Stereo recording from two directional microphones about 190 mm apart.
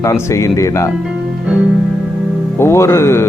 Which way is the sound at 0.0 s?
15° left (ahead or behind).